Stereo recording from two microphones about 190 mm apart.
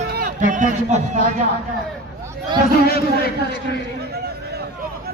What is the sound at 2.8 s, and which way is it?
Speech, 55° left (ahead or behind).